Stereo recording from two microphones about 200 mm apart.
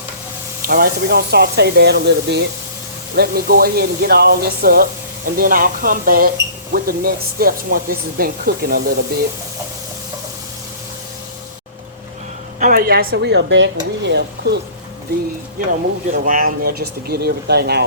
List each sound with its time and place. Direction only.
0.7 s speech: 50° right (ahead or behind)
12.5 s speech: 45° right (ahead or behind)
16.2 s speech: 45° right (ahead or behind)